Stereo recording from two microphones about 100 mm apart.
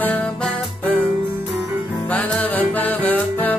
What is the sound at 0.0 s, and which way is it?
Music, 15° left (ahead or behind).